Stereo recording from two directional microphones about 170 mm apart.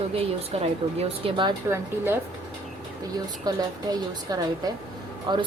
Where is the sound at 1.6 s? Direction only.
15° right (ahead or behind).